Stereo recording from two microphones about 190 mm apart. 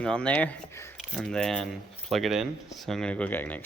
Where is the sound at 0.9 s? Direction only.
Centre (ahead or behind).